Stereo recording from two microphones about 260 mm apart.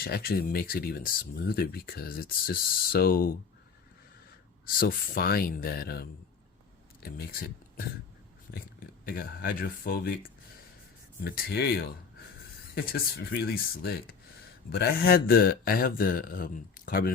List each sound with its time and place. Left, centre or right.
0.0 s speech: left
4.6 s speech: left
11.2 s speech: left